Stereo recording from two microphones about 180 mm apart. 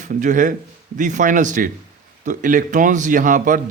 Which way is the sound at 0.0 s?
45° right (ahead or behind).